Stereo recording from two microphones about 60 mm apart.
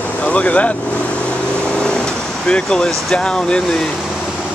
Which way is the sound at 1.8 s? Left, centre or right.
Centre.